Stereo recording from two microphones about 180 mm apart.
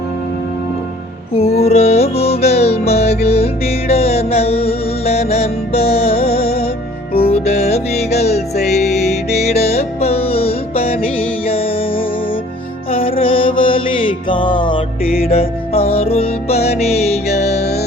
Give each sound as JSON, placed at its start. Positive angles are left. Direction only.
{"t": 1.3, "sound": "music", "side_deg": 35}